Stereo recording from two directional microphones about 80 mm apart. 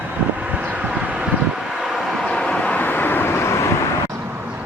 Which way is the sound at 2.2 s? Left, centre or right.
Centre.